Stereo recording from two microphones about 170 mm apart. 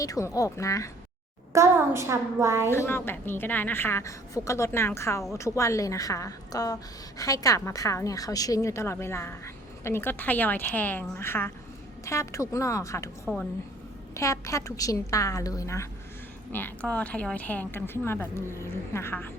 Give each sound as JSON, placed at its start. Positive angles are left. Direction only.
{"t": 0.0, "sound": "a woman's voice", "side_deg": 20}
{"t": 1.5, "sound": "a woman's voice", "side_deg": -15}
{"t": 2.6, "sound": "a woman's voice", "side_deg": 15}
{"t": 13.2, "sound": "a woman's voice", "side_deg": 5}
{"t": 14.1, "sound": "a woman's voice", "side_deg": 20}